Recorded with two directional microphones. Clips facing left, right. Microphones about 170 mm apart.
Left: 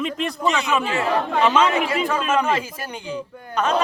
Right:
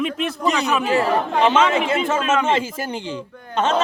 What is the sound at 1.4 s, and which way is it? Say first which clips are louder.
A man's voice: right 1 dB; 30° right (ahead or behind).